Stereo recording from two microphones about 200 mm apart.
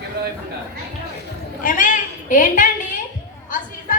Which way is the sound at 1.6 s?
40° left (ahead or behind).